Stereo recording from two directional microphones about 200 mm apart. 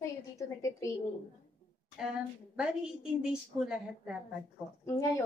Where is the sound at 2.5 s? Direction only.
5° right (ahead or behind).